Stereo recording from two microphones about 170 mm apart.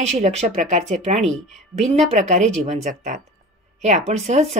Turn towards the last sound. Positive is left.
turn(degrees=-45)  # may be behind; listen again after turning